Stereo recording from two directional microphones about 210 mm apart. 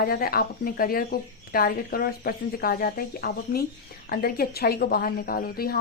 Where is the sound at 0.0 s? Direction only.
45° left (ahead or behind).